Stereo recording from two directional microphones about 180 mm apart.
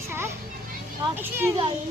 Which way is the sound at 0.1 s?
15° right (ahead or behind).